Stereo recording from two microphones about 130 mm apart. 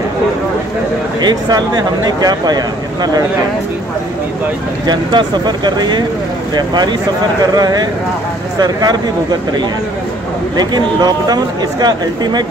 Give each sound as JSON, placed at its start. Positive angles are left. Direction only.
{"t": 1.2, "sound": "speech", "side_deg": -30}
{"t": 4.8, "sound": "speech", "side_deg": -35}
{"t": 10.5, "sound": "speech", "side_deg": -30}